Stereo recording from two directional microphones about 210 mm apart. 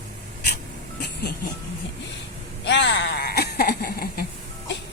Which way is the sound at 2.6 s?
55° left (ahead or behind).